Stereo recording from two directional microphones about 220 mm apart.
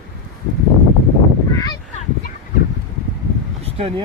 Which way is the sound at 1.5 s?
15° left (ahead or behind).